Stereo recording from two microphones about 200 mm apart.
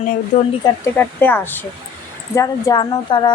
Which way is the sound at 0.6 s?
10° left (ahead or behind).